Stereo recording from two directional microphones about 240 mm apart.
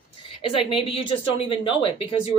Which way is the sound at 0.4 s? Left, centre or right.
Left.